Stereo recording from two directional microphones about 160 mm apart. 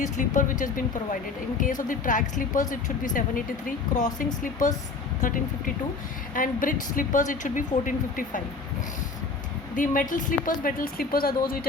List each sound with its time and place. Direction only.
0.0 s speech: 55° left (ahead or behind)
1.5 s speech: 55° left (ahead or behind)
9.7 s speech: 55° left (ahead or behind)